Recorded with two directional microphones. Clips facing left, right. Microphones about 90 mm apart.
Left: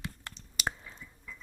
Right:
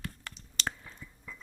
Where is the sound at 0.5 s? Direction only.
15° left (ahead or behind).